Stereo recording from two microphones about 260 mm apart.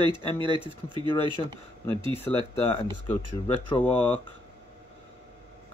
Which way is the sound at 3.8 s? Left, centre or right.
Centre.